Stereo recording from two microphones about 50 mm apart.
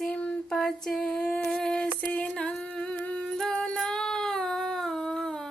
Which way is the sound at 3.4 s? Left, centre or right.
Centre.